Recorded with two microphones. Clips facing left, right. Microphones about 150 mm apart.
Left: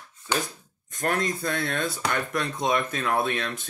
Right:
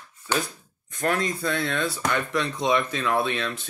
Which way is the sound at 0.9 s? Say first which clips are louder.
Right 1 dB; 45° left (ahead or behind).